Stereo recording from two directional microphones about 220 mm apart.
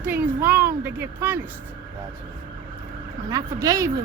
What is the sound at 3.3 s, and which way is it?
Speech, 15° right (ahead or behind).